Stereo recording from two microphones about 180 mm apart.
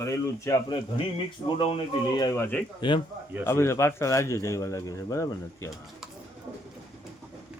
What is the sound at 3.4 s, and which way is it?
A man's voice, 15° left (ahead or behind).